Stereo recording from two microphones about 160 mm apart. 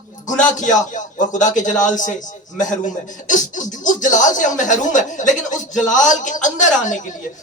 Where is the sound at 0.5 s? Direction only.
50° left (ahead or behind).